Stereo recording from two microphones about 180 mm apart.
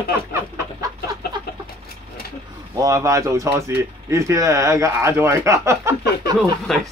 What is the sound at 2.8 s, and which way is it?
Speech, 20° right (ahead or behind).